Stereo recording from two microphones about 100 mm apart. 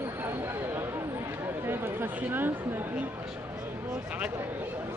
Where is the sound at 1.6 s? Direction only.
20° right (ahead or behind).